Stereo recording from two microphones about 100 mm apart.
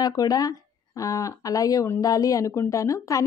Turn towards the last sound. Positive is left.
turn(degrees=30)  # may be behind; listen again after turning